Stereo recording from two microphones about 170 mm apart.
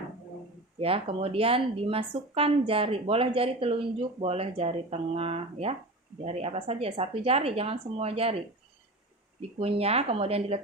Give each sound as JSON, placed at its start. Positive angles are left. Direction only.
{"t": 0.8, "sound": "speech", "side_deg": -35}
{"t": 9.6, "sound": "speech", "side_deg": -35}